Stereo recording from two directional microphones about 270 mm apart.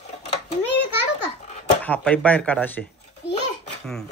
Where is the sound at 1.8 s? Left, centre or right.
Centre.